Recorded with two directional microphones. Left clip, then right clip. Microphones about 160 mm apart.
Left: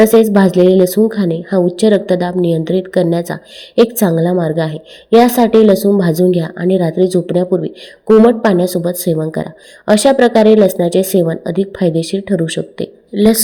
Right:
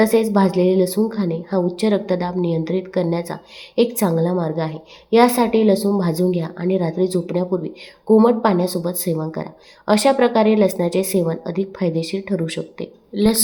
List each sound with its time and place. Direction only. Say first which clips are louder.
0.0 s a woman's voice: left 7 dB; 30° left (ahead or behind)